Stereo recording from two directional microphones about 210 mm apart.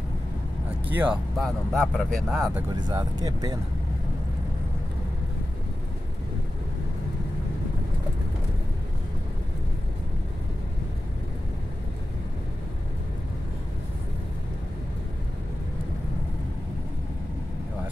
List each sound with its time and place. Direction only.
0.8 s speech: 5° right (ahead or behind)
2.7 s speech: 20° right (ahead or behind)